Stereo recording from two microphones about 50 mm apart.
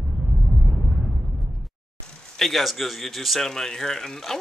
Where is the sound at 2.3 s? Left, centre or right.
Centre.